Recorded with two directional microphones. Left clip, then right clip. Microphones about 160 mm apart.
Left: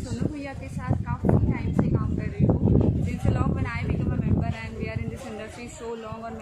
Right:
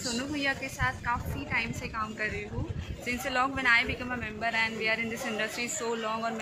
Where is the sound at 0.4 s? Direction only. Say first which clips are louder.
Right 7 dB; 10° left (ahead or behind).